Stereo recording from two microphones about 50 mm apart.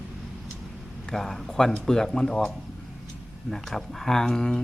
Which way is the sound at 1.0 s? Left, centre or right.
Centre.